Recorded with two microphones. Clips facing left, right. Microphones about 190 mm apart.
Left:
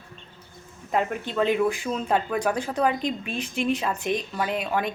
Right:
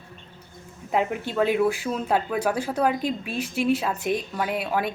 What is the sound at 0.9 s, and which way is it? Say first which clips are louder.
Speech: right 1 dB; 10° right (ahead or behind).